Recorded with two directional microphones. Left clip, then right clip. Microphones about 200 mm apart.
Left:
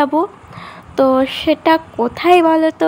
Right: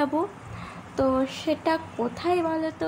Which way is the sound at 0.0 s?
25° left (ahead or behind).